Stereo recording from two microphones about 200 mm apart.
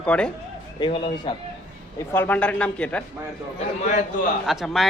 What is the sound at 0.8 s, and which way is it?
Speech, 25° left (ahead or behind).